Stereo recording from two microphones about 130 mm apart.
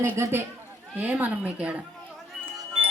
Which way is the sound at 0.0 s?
20° right (ahead or behind).